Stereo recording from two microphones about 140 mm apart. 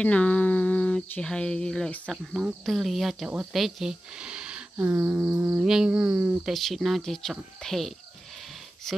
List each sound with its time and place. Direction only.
0.0 s speech: 10° left (ahead or behind)